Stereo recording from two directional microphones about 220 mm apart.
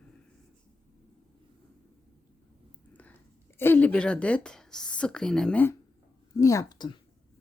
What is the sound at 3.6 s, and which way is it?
A woman's voice, 10° left (ahead or behind).